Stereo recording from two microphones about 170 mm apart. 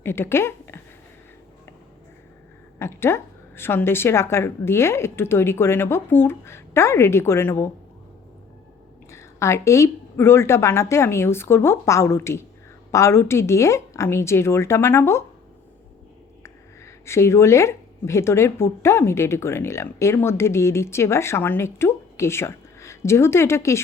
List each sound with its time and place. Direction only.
0.0 s speech: 15° left (ahead or behind)
2.7 s a woman's voice: 15° left (ahead or behind)
9.0 s a woman's voice: 15° left (ahead or behind)
16.4 s speech: 15° left (ahead or behind)